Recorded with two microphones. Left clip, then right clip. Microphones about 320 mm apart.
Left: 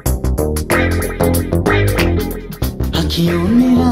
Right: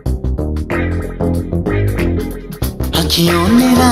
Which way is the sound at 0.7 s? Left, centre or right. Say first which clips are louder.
Left 4 dB; left.